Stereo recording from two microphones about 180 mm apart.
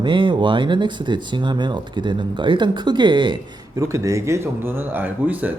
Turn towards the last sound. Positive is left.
turn(degrees=-10)  # may be behind; listen again after turning